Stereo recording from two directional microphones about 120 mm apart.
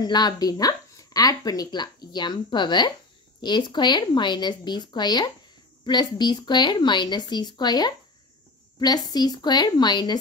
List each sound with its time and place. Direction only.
0.0 s speech: 35° left (ahead or behind)